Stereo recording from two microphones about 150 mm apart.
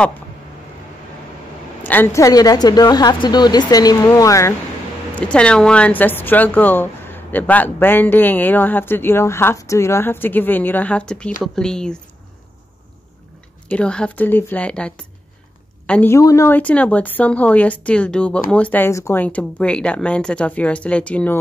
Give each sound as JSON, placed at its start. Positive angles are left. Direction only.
{"t": 1.8, "sound": "a woman's voice", "side_deg": 15}
{"t": 5.1, "sound": "speech", "side_deg": 5}
{"t": 13.7, "sound": "speech", "side_deg": 5}